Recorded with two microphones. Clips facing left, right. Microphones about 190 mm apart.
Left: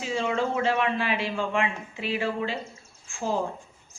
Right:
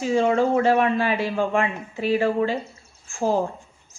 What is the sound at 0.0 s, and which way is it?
A man's voice, 45° right (ahead or behind).